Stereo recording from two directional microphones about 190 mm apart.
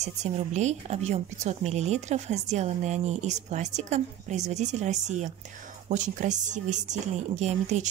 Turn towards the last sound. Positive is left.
turn(degrees=-35)  # may be behind; listen again after turning